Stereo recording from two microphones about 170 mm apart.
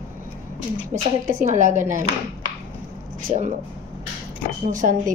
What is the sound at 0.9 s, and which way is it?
A woman's voice, 45° right (ahead or behind).